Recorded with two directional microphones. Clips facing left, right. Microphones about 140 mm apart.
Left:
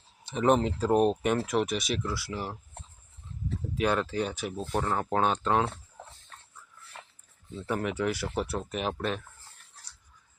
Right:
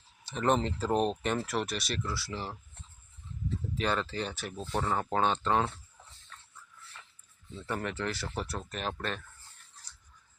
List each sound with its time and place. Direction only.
0.3 s speech: 10° left (ahead or behind)
3.8 s speech: 5° left (ahead or behind)
5.7 s chicken: 50° left (ahead or behind)
7.7 s speech: 5° left (ahead or behind)